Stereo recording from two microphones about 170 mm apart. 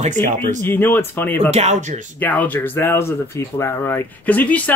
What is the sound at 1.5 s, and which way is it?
Speech, 40° right (ahead or behind).